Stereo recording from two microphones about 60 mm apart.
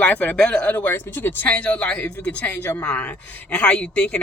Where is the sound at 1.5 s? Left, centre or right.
Left.